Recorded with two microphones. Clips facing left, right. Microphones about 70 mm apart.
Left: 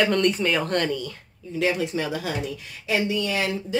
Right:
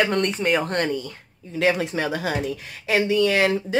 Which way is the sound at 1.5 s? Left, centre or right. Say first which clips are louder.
Right 2 dB; right.